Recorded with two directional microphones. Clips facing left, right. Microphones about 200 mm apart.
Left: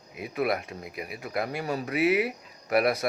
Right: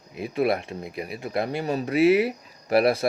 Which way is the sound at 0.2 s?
30° right (ahead or behind).